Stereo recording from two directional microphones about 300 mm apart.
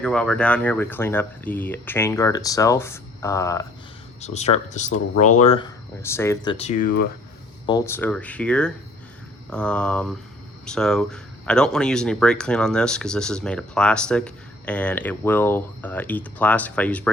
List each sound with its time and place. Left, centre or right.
0.0 s speech: centre
4.2 s speech: left
6.0 s speech: centre; by 6.9 s left
7.7 s speech: centre